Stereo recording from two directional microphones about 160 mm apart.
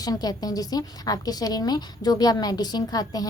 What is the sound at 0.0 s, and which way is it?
A woman's voice, 25° left (ahead or behind).